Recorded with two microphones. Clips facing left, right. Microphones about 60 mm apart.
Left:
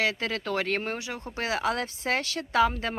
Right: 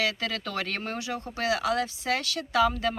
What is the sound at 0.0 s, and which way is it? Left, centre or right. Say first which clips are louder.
Speech: left 1 dB; left.